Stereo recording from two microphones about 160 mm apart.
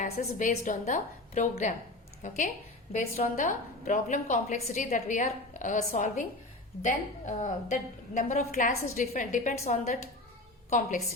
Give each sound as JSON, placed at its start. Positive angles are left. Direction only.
{"t": 0.0, "sound": "a woman's voice", "side_deg": 50}